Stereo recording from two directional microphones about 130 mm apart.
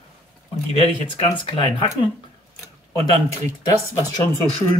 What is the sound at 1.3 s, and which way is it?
Speech, 40° left (ahead or behind).